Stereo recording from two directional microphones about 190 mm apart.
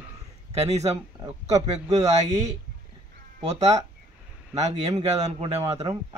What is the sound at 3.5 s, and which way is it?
Speech, 35° right (ahead or behind).